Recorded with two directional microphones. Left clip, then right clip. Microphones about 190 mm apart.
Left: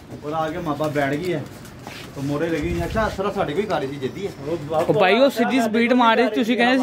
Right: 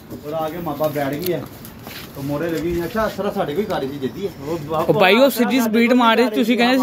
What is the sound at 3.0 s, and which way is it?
Speech, 10° left (ahead or behind).